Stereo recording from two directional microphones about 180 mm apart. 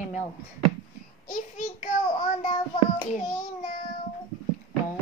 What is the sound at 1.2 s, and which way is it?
Speech, 45° left (ahead or behind).